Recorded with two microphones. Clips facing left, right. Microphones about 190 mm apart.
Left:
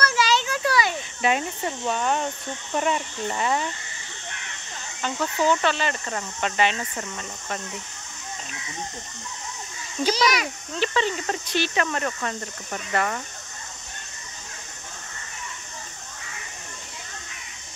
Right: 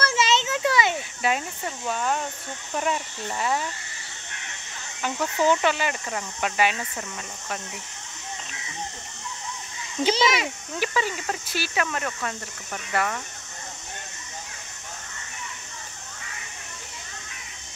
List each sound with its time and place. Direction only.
0.0 s a sound: 25° right (ahead or behind)
0.9 s cricket: 5° right (ahead or behind)
2.8 s speech: 5° right (ahead or behind)
5.0 s speech: 15° right (ahead or behind)
10.0 s a child's voice: 25° right (ahead or behind)
10.8 s speech: 10° right (ahead or behind)